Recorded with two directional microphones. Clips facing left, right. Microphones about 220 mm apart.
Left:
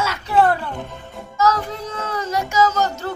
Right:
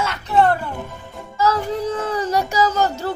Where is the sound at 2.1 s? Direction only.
35° right (ahead or behind).